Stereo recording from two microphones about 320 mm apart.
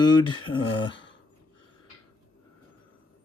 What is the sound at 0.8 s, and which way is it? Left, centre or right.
Speech, left.